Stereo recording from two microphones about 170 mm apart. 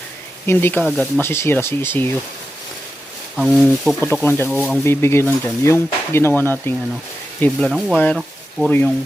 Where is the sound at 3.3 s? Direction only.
5° right (ahead or behind).